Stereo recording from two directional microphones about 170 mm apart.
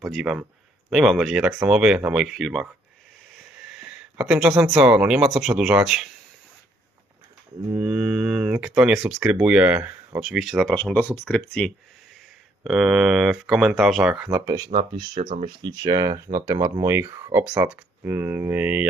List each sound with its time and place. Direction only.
0.0 s speech: centre (ahead or behind)
3.3 s a sound: 5° right (ahead or behind)
4.7 s speech: 5° right (ahead or behind)
7.8 s speech: 5° right (ahead or behind)
12.6 s speech: centre (ahead or behind)
14.9 s speech: 50° right (ahead or behind)
15.3 s speech: 25° right (ahead or behind); by 18.9 s 10° right (ahead or behind)